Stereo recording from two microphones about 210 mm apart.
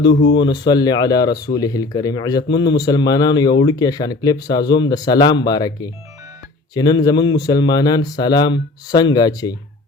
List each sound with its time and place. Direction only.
0.3 s speech: 20° left (ahead or behind)